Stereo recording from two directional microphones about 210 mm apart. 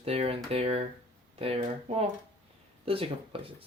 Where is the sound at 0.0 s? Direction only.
30° right (ahead or behind).